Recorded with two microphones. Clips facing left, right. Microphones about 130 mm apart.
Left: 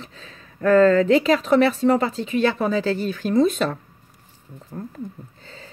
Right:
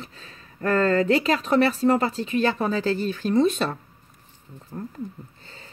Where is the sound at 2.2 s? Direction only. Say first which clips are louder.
Left 2 dB; 40° right (ahead or behind).